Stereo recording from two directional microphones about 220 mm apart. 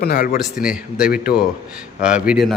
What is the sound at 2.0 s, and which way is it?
Speech, 5° right (ahead or behind).